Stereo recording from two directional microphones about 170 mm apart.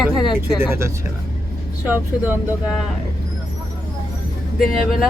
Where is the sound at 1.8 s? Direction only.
10° right (ahead or behind).